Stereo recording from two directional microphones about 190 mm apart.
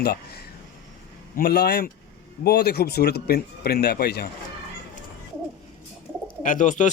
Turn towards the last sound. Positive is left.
turn(degrees=40)  # may be behind; listen again after turning